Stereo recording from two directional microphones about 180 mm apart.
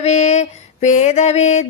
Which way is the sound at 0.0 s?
40° left (ahead or behind).